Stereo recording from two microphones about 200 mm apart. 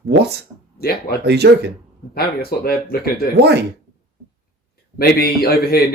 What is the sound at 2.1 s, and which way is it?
Speech, 50° left (ahead or behind).